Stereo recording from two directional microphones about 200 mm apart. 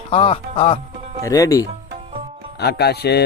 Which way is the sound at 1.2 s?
15° left (ahead or behind).